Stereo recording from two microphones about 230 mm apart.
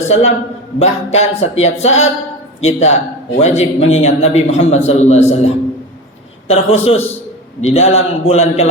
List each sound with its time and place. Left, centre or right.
0.1 s a man's voice: left